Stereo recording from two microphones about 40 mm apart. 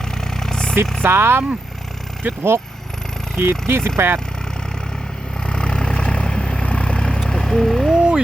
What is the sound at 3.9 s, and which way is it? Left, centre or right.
Speech, right.